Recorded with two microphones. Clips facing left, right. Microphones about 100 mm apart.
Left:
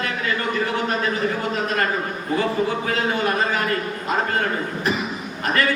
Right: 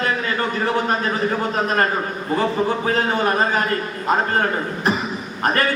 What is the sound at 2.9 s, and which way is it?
Speech, 40° right (ahead or behind).